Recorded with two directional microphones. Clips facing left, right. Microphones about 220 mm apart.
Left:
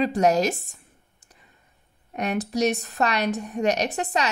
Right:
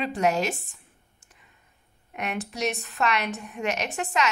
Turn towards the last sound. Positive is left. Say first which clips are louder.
# left 3 dB
turn(degrees=35)  # may be behind; listen again after turning